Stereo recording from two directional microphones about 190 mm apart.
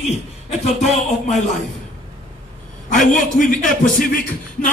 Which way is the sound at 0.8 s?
40° left (ahead or behind).